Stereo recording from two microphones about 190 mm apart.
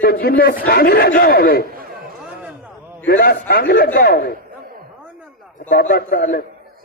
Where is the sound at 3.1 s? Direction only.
55° left (ahead or behind).